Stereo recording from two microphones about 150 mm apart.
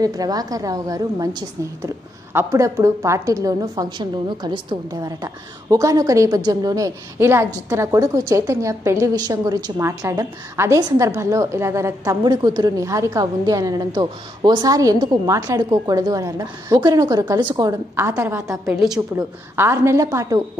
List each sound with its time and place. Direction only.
0.0 s a woman's voice: 25° right (ahead or behind)
2.3 s a woman's voice: 15° right (ahead or behind)